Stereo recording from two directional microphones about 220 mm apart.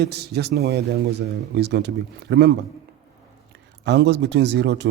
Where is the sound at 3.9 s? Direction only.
50° right (ahead or behind).